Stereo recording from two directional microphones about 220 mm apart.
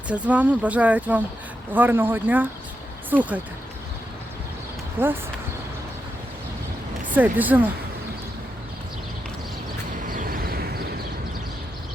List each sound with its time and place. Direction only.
0.1 s speech: 5° right (ahead or behind)
5.0 s speech: 10° right (ahead or behind)
7.1 s speech: 5° right (ahead or behind)
10.1 s vehicle: 40° right (ahead or behind)